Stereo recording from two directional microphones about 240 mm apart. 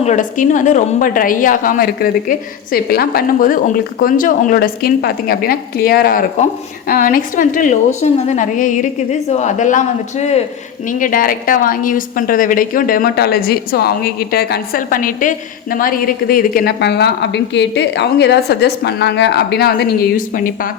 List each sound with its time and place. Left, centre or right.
0.0 s a woman's voice: left